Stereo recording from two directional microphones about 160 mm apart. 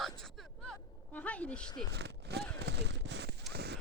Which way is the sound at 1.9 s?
90° right.